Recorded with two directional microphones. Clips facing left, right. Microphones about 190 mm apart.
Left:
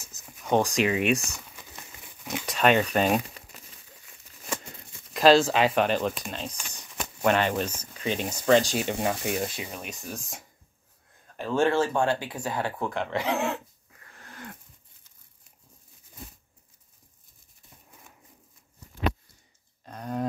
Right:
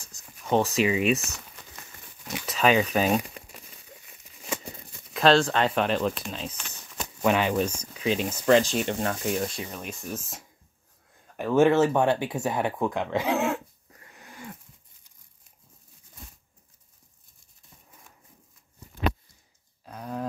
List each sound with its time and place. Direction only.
0.1 s speech: centre (ahead or behind)
2.0 s a sound: 15° left (ahead or behind)
2.5 s speech: centre (ahead or behind)
5.1 s speech: 5° left (ahead or behind)
10.1 s speech: 5° right (ahead or behind)
11.3 s speech: 15° right (ahead or behind)
13.3 s speech: centre (ahead or behind)
14.1 s a sound: 10° right (ahead or behind)
19.8 s a sound: 5° right (ahead or behind)